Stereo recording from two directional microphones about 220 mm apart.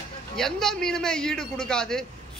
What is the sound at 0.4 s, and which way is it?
A man's voice, centre (ahead or behind).